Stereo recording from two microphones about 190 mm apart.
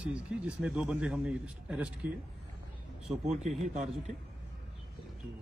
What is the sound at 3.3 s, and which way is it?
Speech, centre (ahead or behind).